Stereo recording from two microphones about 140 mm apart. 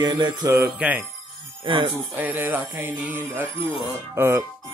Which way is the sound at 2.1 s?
15° right (ahead or behind).